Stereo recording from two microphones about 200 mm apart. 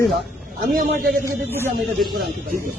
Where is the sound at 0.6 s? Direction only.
45° right (ahead or behind).